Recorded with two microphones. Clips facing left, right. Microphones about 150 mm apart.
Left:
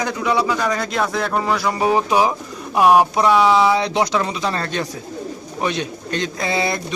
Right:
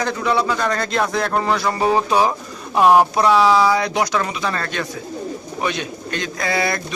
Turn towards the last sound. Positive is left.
turn(degrees=20)  # may be behind; listen again after turning